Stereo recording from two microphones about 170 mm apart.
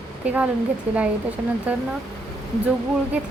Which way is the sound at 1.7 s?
5° right (ahead or behind).